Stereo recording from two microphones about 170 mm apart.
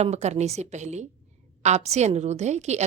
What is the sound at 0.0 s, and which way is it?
A woman's voice, 40° right (ahead or behind).